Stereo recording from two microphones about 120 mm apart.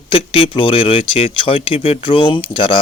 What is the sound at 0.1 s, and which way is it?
Speech, 50° left (ahead or behind).